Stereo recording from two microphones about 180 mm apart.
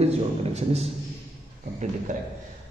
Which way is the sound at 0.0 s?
35° right (ahead or behind).